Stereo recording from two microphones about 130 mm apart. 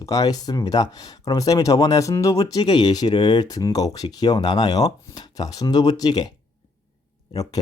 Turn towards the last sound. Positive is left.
turn(degrees=30)  # may be behind; listen again after turning